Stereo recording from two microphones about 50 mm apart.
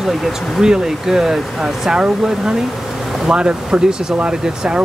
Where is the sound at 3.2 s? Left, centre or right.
Centre.